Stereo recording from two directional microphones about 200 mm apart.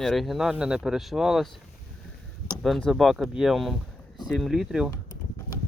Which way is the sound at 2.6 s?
Centre (ahead or behind).